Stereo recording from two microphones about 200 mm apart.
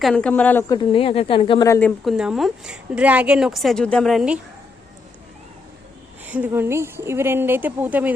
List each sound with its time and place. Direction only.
0.0 s speech: 5° left (ahead or behind)
0.8 s speech: 25° left (ahead or behind)
2.0 s a woman's voice: 5° right (ahead or behind)
6.2 s a woman's voice: 10° right (ahead or behind)